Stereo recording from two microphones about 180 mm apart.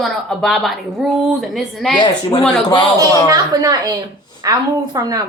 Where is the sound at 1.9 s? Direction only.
25° left (ahead or behind).